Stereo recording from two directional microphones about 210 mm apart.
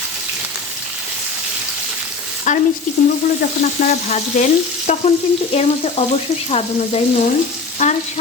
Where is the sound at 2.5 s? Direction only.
35° left (ahead or behind).